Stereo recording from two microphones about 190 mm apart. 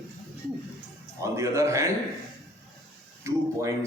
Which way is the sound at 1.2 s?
15° right (ahead or behind).